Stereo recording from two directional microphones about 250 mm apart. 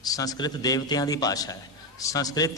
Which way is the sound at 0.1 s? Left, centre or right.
Centre.